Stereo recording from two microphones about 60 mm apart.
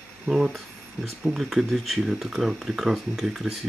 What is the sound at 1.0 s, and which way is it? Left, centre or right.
Speech, centre.